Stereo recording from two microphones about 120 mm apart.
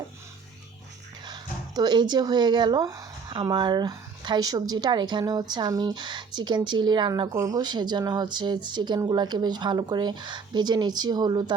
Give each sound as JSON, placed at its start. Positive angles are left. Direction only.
{"t": 1.2, "sound": "speech", "side_deg": -35}